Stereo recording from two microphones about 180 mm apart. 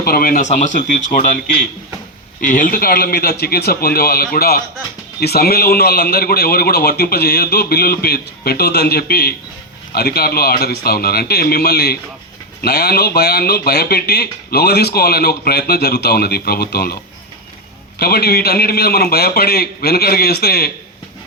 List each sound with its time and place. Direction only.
0.0 s speech: 55° left (ahead or behind)
2.4 s speech: 50° left (ahead or behind)
18.0 s speech: 60° left (ahead or behind)